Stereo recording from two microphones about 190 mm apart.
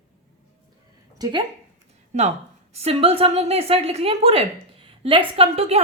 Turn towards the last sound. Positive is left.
turn(degrees=-30)  # may be behind; listen again after turning